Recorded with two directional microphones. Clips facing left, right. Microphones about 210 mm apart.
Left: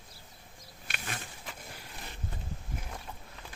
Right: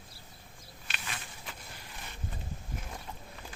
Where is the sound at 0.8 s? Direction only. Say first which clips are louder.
Left 3 dB; 50° left (ahead or behind).